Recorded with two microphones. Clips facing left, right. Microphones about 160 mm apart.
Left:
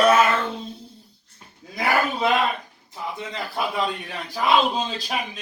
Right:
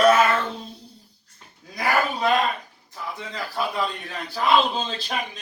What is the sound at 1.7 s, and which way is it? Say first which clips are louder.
A man's voice: left 1 dB; 20° left (ahead or behind).